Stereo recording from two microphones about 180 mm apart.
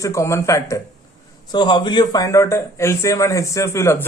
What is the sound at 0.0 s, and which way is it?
A man's voice, 15° left (ahead or behind).